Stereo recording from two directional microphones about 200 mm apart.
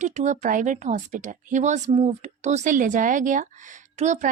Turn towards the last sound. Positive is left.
turn(degrees=-35)  # may be behind; listen again after turning